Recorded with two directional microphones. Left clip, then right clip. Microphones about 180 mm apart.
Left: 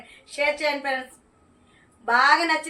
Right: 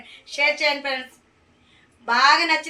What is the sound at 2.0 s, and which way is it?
Speech, 15° left (ahead or behind).